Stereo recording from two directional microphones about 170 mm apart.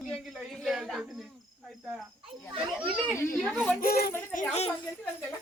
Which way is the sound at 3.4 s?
Centre (ahead or behind).